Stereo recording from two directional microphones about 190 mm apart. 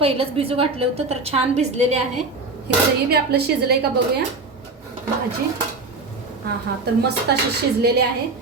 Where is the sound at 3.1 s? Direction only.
60° right (ahead or behind).